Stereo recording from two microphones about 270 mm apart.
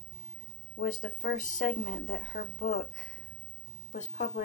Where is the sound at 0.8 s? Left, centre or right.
Left.